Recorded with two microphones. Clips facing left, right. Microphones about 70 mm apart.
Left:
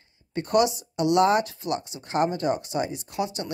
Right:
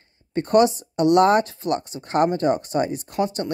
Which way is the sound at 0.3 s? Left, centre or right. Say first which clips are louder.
Right 5 dB; right.